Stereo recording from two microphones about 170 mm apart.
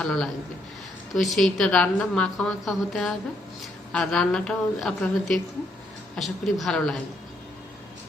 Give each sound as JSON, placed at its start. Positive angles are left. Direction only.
{"t": 0.0, "sound": "a woman's voice", "side_deg": 5}